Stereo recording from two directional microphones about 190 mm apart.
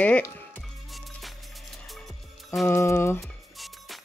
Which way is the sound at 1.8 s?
Centre (ahead or behind).